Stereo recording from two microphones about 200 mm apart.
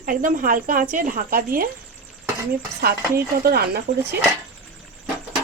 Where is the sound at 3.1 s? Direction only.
50° right (ahead or behind).